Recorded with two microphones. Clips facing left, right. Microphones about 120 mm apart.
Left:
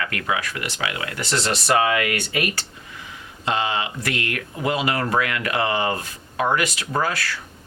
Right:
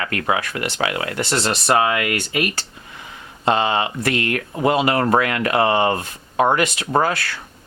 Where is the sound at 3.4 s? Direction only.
40° right (ahead or behind).